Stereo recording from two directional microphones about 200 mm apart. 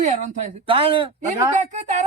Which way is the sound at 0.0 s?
35° right (ahead or behind).